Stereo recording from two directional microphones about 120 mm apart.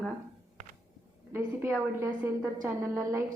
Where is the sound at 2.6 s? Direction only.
25° right (ahead or behind).